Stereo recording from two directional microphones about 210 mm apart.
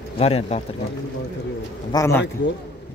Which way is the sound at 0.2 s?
30° left (ahead or behind).